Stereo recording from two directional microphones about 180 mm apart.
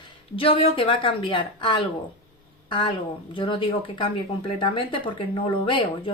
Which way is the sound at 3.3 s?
25° left (ahead or behind).